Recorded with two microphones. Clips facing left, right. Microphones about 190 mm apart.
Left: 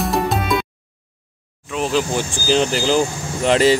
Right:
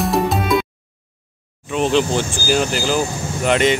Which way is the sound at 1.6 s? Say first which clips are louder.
Right 3 dB; centre (ahead or behind).